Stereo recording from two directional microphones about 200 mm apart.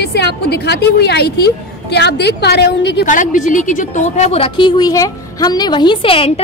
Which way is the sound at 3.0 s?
40° left (ahead or behind).